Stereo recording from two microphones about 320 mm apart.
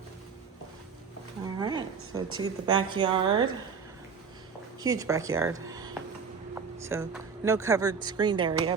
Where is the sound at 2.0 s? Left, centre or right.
Right.